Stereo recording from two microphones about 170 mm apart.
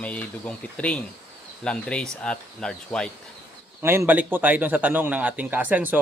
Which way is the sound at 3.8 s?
15° right (ahead or behind).